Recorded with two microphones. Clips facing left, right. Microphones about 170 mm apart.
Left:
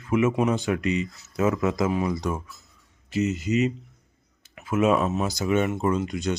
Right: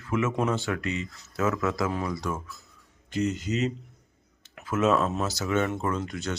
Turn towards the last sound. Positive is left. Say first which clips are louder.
# left 5 dB
turn(degrees=15)  # may be behind; listen again after turning